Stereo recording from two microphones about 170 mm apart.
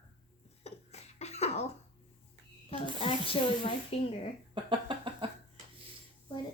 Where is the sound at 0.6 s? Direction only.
40° left (ahead or behind).